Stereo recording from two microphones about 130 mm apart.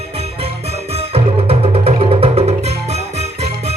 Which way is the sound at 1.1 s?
50° right (ahead or behind).